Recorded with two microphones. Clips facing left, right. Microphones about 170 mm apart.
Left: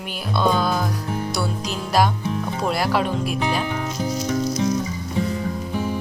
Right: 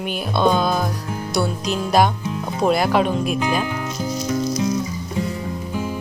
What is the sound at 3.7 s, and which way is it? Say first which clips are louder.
Speech: even; 20° left (ahead or behind).